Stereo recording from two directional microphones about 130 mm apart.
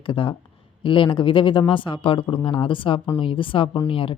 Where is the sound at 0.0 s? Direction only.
40° left (ahead or behind).